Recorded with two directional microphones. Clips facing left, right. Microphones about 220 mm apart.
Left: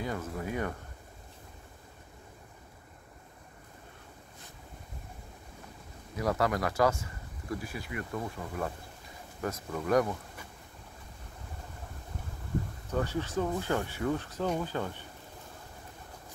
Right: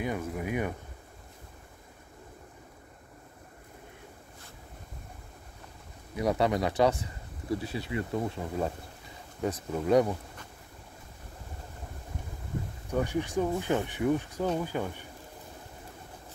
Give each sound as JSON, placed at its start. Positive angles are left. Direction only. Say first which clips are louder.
{"t": 0.0, "sound": "speech", "louder": "right 3 dB", "side_deg": -15}
{"t": 6.1, "sound": "speech", "louder": "right 3 dB", "side_deg": -15}
{"t": 12.9, "sound": "speech", "louder": "right 3 dB", "side_deg": -15}